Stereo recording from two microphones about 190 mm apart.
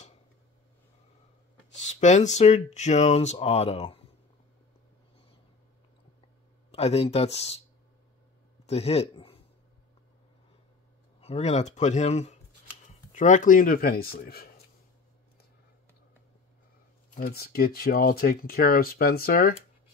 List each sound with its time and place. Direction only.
1.8 s speech: 40° left (ahead or behind)
6.7 s speech: 35° left (ahead or behind)
8.6 s a man's voice: 35° left (ahead or behind)
11.1 s speech: 30° left (ahead or behind); by 14.5 s 55° left (ahead or behind)
17.1 s speech: 50° left (ahead or behind)